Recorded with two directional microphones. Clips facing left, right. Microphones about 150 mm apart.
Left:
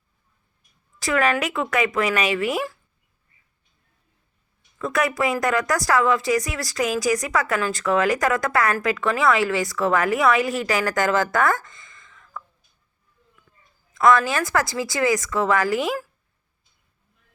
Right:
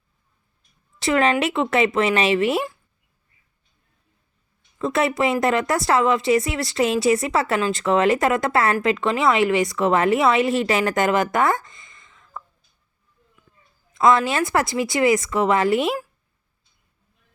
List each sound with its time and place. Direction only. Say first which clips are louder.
0.9 s a woman's voice: right 2 dB; 25° right (ahead or behind)
4.8 s a woman's voice: right 2 dB; 25° right (ahead or behind)
13.9 s a woman's voice: even; 20° right (ahead or behind)